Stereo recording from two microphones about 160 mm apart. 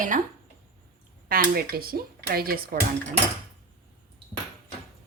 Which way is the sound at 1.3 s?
65° right (ahead or behind).